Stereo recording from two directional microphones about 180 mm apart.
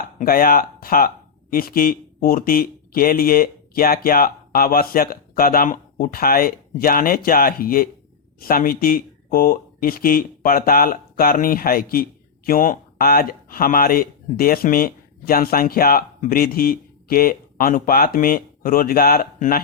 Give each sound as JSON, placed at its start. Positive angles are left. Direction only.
{"t": 0.2, "sound": "speech", "side_deg": 55}